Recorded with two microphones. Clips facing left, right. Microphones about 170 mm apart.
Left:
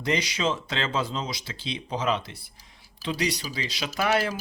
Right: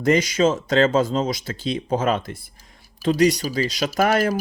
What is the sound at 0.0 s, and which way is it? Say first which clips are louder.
Speech: right 9 dB; 45° right (ahead or behind).